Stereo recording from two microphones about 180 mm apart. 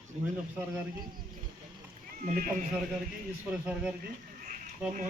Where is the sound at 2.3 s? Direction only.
45° right (ahead or behind).